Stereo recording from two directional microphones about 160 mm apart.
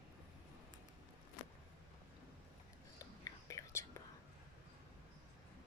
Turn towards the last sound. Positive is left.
turn(degrees=20)  # may be behind; listen again after turning